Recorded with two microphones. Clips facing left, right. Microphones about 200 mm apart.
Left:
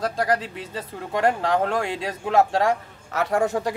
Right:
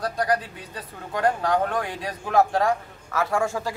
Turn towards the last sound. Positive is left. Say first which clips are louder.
# left 3 dB
turn(degrees=20)  # may be behind; listen again after turning